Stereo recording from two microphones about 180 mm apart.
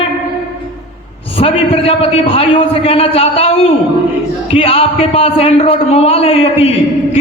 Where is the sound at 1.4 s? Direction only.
30° left (ahead or behind).